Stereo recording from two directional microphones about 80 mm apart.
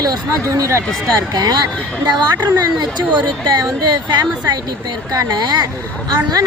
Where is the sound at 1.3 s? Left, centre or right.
Right.